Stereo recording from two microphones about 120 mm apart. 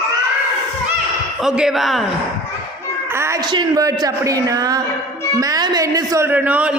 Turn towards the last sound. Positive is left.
turn(degrees=-10)  # may be behind; listen again after turning